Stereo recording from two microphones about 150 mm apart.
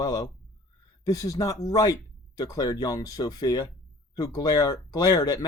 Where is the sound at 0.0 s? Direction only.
25° left (ahead or behind).